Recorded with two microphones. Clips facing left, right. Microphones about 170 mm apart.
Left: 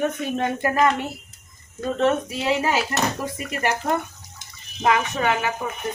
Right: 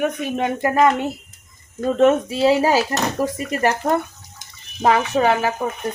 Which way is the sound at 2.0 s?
30° right (ahead or behind).